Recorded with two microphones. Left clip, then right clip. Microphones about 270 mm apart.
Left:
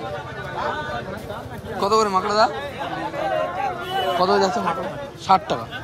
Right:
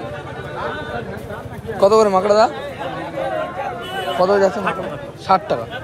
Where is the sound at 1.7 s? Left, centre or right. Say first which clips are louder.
Right 6 dB; centre.